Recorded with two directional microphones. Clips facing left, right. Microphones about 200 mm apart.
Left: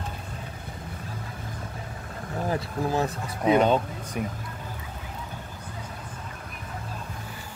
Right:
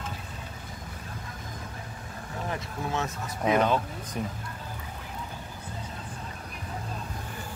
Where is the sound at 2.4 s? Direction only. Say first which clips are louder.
Left 6 dB; 35° left (ahead or behind).